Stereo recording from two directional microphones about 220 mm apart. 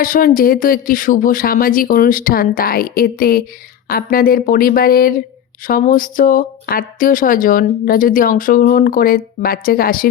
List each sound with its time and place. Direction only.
0.0 s speech: 40° left (ahead or behind)